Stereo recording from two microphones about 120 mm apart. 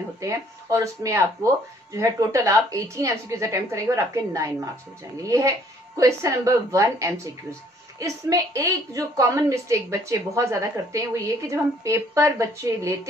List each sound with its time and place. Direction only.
0.2 s a woman's voice: 25° right (ahead or behind)